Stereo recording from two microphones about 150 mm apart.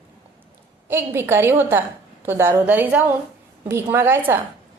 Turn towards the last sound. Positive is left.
turn(degrees=-15)  # may be behind; listen again after turning